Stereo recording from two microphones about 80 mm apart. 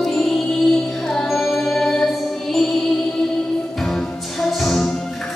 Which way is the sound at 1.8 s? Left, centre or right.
Centre.